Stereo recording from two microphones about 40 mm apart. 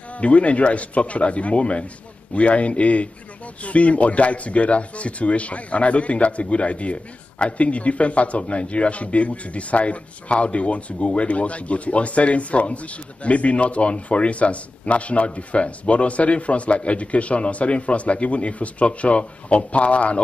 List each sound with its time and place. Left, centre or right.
0.2 s speech: left